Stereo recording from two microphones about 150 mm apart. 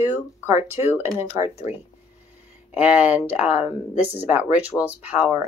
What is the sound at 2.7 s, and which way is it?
Speech, 10° right (ahead or behind).